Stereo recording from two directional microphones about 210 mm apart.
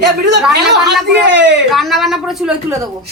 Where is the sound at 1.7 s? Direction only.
Centre (ahead or behind).